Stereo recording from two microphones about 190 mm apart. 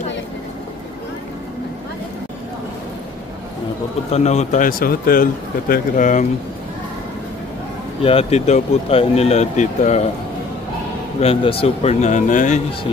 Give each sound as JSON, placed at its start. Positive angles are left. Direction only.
{"t": 4.1, "sound": "speech", "side_deg": 35}
{"t": 8.0, "sound": "speech", "side_deg": 30}
{"t": 11.1, "sound": "speech", "side_deg": 30}